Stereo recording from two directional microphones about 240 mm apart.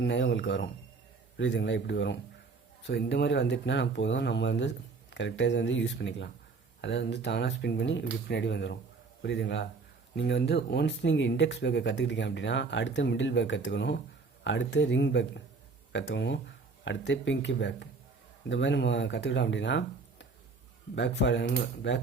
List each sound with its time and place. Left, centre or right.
0.0 s speech: left